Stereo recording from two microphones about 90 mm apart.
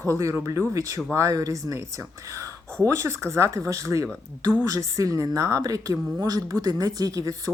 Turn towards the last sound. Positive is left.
turn(degrees=-45)  # may be behind; listen again after turning